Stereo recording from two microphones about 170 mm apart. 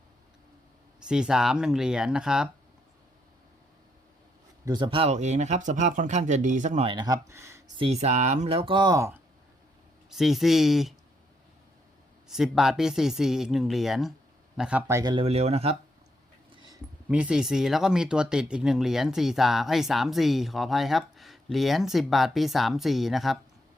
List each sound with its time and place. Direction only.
0.9 s speech: 5° right (ahead or behind)
4.6 s speech: 25° right (ahead or behind); by 6.8 s 45° right (ahead or behind)
6.8 s speech: 25° right (ahead or behind)
7.8 s speech: 40° right (ahead or behind); by 9.2 s 15° right (ahead or behind)
10.1 s speech: centre (ahead or behind)
12.3 s speech: centre (ahead or behind)
15.1 s speech: 35° right (ahead or behind)
17.1 s speech: 5° right (ahead or behind)